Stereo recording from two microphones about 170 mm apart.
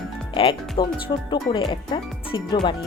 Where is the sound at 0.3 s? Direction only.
30° left (ahead or behind).